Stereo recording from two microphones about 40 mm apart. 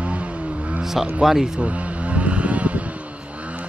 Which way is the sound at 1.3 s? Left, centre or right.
Centre.